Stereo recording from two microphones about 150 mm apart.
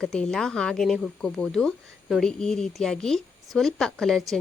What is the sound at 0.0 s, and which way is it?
Speech, 5° left (ahead or behind).